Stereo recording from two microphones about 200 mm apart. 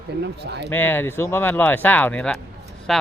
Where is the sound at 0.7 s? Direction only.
10° left (ahead or behind).